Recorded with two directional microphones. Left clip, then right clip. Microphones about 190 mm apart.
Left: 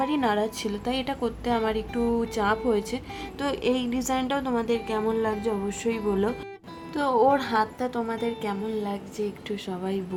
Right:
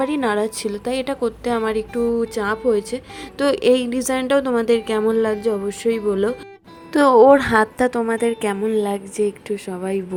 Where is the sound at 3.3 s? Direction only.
30° right (ahead or behind).